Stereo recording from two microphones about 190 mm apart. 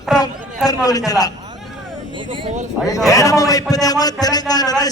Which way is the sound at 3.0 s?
15° left (ahead or behind).